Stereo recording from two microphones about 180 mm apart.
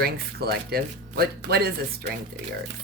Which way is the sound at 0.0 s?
60° right (ahead or behind).